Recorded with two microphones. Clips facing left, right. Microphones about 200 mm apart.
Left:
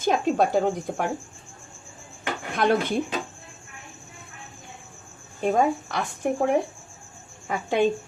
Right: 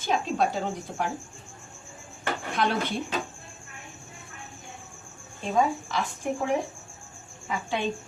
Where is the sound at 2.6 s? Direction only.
50° left (ahead or behind).